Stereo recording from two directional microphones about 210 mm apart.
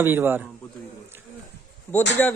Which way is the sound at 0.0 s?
10° right (ahead or behind).